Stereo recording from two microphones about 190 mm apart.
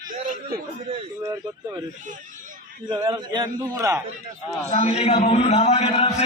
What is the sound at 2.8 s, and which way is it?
A man's voice, 20° right (ahead or behind).